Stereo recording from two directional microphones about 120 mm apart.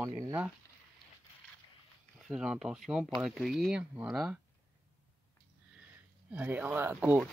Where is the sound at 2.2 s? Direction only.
5° right (ahead or behind).